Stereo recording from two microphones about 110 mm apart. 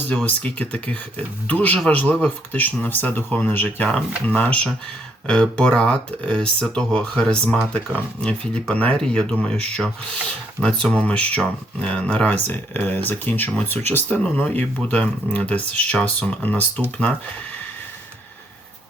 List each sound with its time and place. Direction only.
0.3 s speech: 10° left (ahead or behind)